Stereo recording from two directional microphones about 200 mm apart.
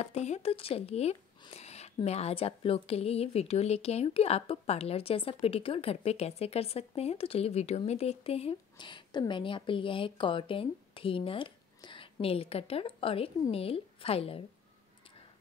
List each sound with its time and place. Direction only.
0.0 s speech: 35° left (ahead or behind)